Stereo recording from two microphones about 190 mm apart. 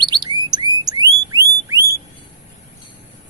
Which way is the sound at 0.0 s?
25° right (ahead or behind).